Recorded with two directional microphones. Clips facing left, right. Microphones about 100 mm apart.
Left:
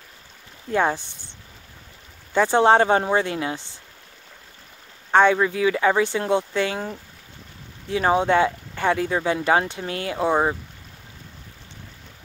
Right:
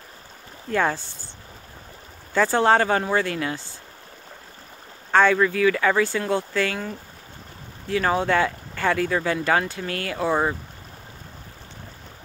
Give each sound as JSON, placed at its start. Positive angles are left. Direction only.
{"t": 0.7, "sound": "speech", "side_deg": 20}
{"t": 2.3, "sound": "speech", "side_deg": 20}
{"t": 5.1, "sound": "speech", "side_deg": 20}
{"t": 7.9, "sound": "speech", "side_deg": 20}